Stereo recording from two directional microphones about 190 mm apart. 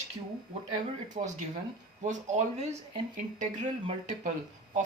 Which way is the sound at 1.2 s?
35° right (ahead or behind).